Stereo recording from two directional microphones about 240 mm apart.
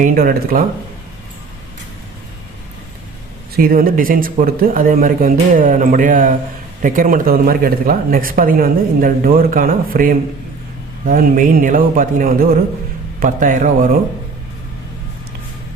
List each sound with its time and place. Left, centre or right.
0.0 s speech: right
3.5 s speech: right